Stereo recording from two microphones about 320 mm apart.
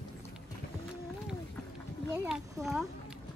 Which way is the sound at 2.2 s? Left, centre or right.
Centre.